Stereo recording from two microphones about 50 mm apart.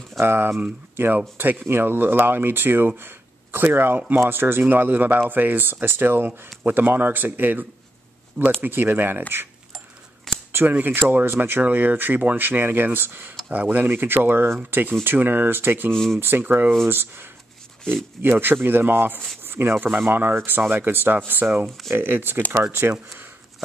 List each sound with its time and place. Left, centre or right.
0.2 s speech: right
10.5 s a sound: right
11.1 s speech: right
11.6 s speech: right
13.8 s speech: right
15.9 s speech: centre
16.2 s speech: right